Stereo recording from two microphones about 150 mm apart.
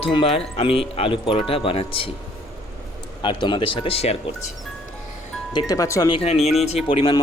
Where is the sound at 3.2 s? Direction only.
35° left (ahead or behind).